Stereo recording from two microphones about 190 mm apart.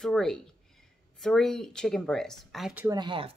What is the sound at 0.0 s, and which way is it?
Speech, 5° left (ahead or behind).